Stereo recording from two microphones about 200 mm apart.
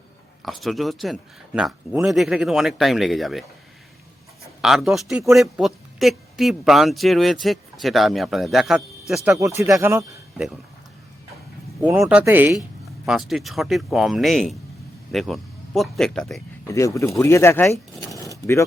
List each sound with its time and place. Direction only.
0.4 s speech: centre (ahead or behind)
4.6 s speech: centre (ahead or behind)
9.3 s speech: 15° right (ahead or behind)
11.8 s speech: 10° right (ahead or behind)
16.6 s speech: 15° left (ahead or behind)
18.1 s keys jangling: 15° left (ahead or behind)